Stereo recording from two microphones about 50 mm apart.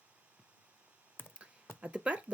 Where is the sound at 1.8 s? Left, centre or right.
Right.